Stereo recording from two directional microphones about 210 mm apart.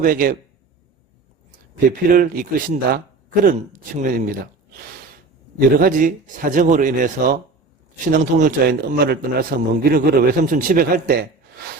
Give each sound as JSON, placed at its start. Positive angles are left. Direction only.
{"t": 0.0, "sound": "speech", "side_deg": -40}
{"t": 2.0, "sound": "speech", "side_deg": -40}
{"t": 5.5, "sound": "a man's voice", "side_deg": -45}